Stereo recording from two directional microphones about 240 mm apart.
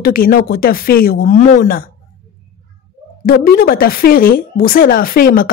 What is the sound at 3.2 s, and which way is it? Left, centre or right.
Speech, left.